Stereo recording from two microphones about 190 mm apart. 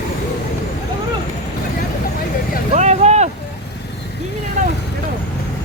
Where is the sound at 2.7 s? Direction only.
35° right (ahead or behind).